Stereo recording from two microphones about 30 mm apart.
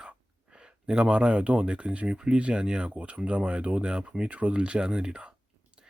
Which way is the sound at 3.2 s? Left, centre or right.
Right.